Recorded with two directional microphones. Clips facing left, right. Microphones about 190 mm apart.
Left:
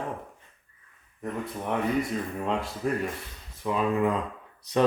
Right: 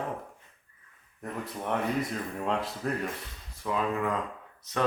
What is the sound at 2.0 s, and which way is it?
Speech, centre (ahead or behind).